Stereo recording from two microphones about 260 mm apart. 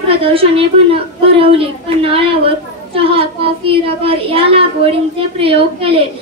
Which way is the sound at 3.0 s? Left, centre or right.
Right.